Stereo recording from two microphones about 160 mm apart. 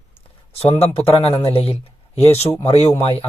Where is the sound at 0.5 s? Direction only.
40° left (ahead or behind).